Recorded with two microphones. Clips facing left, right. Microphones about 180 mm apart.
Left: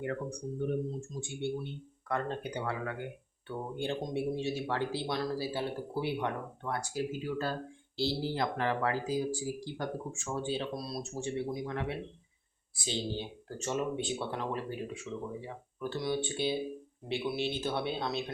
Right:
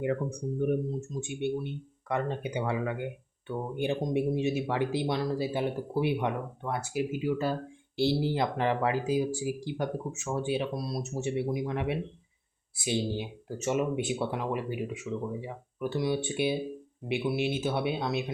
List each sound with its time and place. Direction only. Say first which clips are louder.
0.3 s speech: right 5 dB; 15° right (ahead or behind)